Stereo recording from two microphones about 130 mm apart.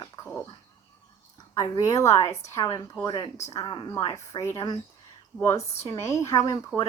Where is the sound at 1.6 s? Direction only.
25° left (ahead or behind).